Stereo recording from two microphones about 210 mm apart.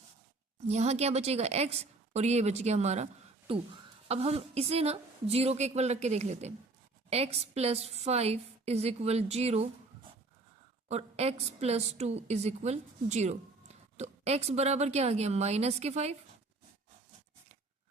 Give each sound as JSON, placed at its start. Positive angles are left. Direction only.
{"t": 0.7, "sound": "a woman's voice", "side_deg": -30}
{"t": 10.8, "sound": "a woman's voice", "side_deg": -30}